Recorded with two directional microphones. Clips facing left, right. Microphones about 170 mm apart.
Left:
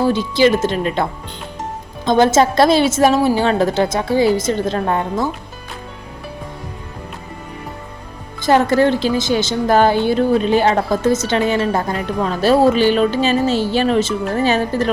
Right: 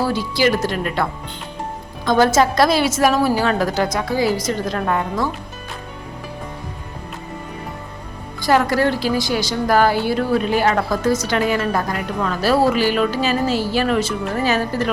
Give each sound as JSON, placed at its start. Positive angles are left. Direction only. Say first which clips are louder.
{"t": 0.0, "sound": "a woman's voice", "louder": "left 4 dB", "side_deg": 20}
{"t": 2.0, "sound": "a woman's voice", "louder": "left 2 dB", "side_deg": 20}
{"t": 8.4, "sound": "a woman's voice", "louder": "left 3 dB", "side_deg": 25}